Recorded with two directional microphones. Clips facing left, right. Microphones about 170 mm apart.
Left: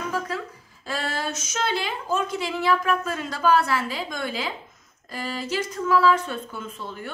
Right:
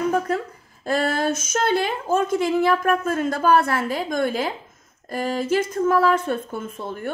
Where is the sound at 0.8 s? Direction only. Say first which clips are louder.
Right 8 dB; 50° right (ahead or behind).